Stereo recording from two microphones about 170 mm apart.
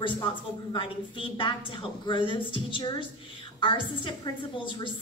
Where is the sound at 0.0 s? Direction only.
30° left (ahead or behind).